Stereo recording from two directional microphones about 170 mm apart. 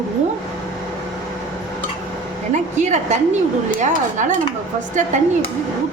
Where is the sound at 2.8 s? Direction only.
45° right (ahead or behind).